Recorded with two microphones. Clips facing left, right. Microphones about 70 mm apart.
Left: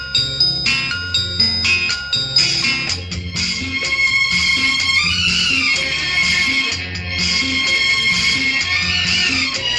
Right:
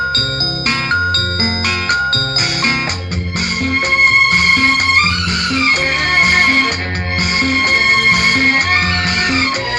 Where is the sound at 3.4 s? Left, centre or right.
Right.